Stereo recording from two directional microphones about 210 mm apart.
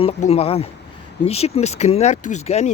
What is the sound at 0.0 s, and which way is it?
Speech, 30° left (ahead or behind).